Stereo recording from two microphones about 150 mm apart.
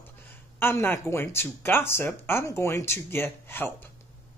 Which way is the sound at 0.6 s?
15° left (ahead or behind).